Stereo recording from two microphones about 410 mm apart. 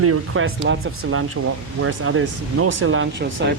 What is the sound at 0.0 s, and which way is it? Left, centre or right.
Speech, right.